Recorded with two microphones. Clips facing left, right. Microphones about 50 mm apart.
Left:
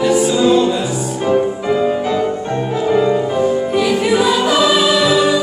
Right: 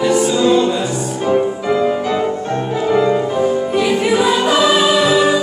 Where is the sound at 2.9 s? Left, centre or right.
Centre.